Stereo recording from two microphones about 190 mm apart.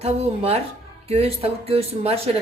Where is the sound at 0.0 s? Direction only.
35° right (ahead or behind).